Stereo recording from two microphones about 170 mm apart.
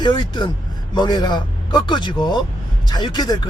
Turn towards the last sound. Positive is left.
turn(degrees=25)  # may be behind; listen again after turning